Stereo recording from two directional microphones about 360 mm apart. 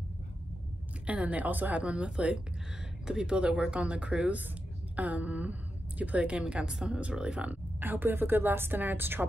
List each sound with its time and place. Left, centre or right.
1.0 s a woman's voice: centre